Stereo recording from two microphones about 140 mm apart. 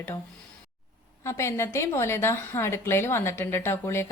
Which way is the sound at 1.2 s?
20° left (ahead or behind).